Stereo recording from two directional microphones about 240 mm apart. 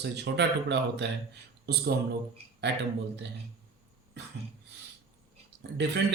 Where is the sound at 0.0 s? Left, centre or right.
Right.